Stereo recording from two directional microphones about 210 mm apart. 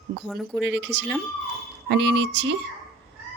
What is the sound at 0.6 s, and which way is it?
Speech, 55° right (ahead or behind).